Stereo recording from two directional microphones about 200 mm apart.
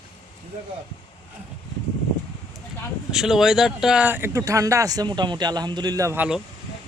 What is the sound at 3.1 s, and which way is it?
Speech, centre (ahead or behind).